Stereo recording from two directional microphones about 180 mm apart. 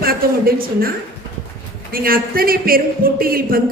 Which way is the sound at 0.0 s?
55° right (ahead or behind).